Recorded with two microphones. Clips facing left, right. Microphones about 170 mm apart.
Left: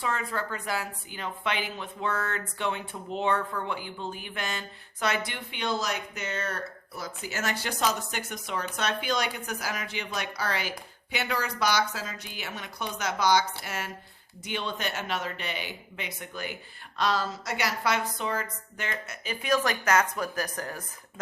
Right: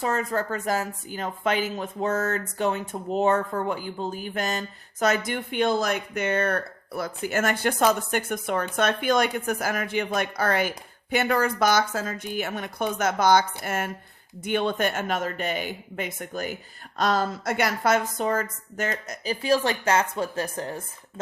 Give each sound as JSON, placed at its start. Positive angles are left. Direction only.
{"t": 0.0, "sound": "a woman's voice", "side_deg": -40}